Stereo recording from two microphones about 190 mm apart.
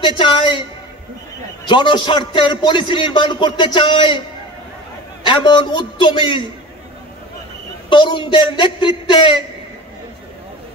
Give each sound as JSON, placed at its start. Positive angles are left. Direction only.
{"t": 0.0, "sound": "a man's voice", "side_deg": 25}
{"t": 1.7, "sound": "a man's voice", "side_deg": 25}
{"t": 5.2, "sound": "a man's voice", "side_deg": 25}
{"t": 7.9, "sound": "a man's voice", "side_deg": 25}